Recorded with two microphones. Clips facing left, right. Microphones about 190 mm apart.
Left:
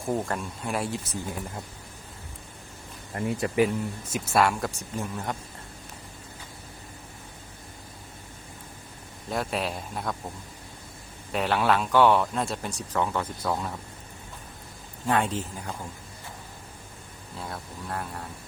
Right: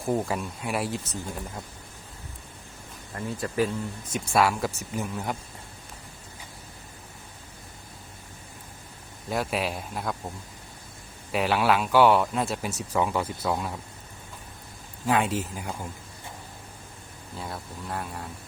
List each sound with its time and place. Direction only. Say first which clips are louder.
0.0 s speech: right 2 dB; 5° right (ahead or behind)
3.2 s speech: left 3 dB; 20° left (ahead or behind); by 5.4 s centre (ahead or behind)
9.3 s speech: right 1 dB; centre (ahead or behind)
15.0 s speech: right 1 dB; 5° right (ahead or behind)
17.3 s speech: right 1 dB; centre (ahead or behind)